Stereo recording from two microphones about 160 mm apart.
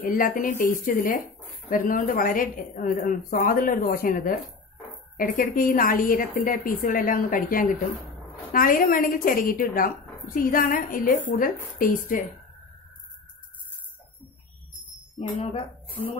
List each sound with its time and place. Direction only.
0.0 s a woman's voice: 60° left (ahead or behind)